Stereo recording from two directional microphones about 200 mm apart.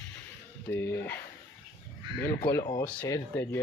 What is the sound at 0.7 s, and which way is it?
Speech, 10° left (ahead or behind).